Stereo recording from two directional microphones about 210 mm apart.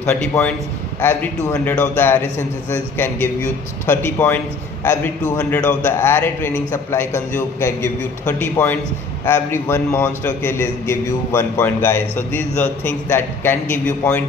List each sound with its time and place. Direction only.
0.0 s a man's voice: 5° left (ahead or behind)